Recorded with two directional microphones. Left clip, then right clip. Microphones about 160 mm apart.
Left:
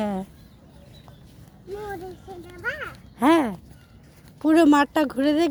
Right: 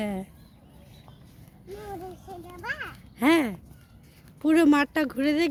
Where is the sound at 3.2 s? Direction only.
Centre (ahead or behind).